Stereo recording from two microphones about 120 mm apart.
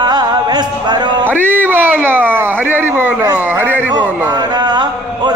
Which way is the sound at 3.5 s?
15° right (ahead or behind).